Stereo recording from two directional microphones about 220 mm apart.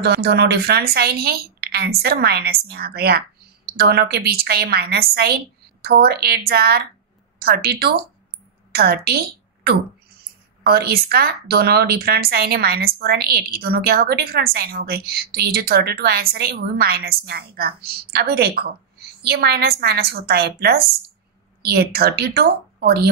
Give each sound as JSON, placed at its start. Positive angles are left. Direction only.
{"t": 0.0, "sound": "speech", "side_deg": -45}
{"t": 10.7, "sound": "speech", "side_deg": -45}